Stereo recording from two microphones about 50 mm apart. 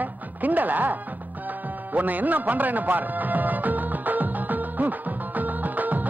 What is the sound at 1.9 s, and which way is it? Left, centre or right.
Speech, right.